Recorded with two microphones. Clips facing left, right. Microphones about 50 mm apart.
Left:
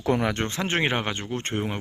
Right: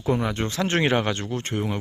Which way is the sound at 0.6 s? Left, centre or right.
Centre.